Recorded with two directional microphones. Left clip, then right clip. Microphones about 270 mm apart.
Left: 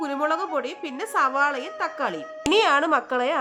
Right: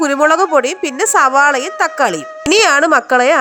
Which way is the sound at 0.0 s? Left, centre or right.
Right.